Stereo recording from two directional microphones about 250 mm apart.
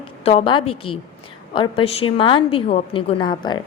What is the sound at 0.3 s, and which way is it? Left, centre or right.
A woman's voice, left.